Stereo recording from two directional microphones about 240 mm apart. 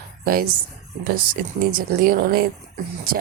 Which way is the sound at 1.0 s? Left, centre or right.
Right.